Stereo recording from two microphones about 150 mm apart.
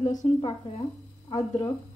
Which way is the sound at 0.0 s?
55° left (ahead or behind).